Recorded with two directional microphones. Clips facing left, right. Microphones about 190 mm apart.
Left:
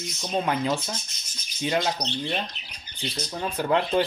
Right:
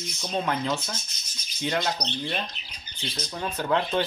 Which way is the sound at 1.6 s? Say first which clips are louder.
Left 2 dB; 15° left (ahead or behind).